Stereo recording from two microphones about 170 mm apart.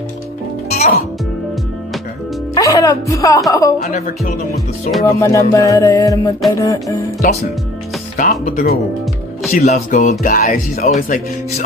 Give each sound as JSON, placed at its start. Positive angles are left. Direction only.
{"t": 0.7, "sound": "music", "side_deg": 40}
{"t": 2.5, "sound": "a woman's voice", "side_deg": 20}
{"t": 3.8, "sound": "music", "side_deg": 55}
{"t": 5.0, "sound": "music", "side_deg": 20}
{"t": 8.2, "sound": "music", "side_deg": 55}
{"t": 9.5, "sound": "speech", "side_deg": 45}